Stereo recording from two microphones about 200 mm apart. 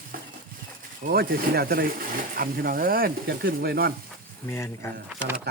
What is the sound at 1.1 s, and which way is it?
Speech, 50° right (ahead or behind).